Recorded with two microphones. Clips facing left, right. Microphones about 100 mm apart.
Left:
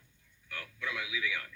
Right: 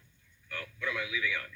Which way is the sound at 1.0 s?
15° left (ahead or behind).